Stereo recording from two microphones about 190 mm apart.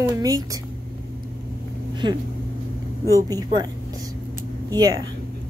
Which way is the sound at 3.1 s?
20° right (ahead or behind).